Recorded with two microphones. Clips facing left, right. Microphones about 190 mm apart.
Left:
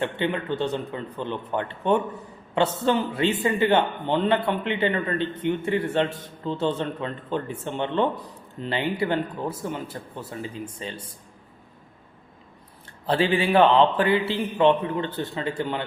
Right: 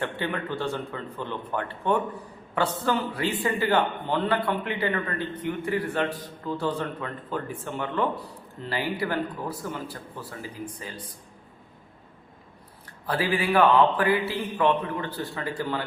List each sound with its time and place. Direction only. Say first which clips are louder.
0.0 s a man's voice: left 4 dB; 20° left (ahead or behind)
13.1 s a man's voice: left 4 dB; 25° left (ahead or behind)